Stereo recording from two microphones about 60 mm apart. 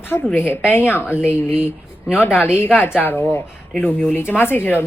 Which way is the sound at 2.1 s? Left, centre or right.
Left.